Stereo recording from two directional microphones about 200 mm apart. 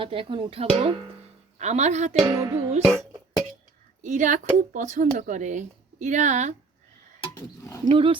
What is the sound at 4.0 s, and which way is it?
Speech, 40° right (ahead or behind).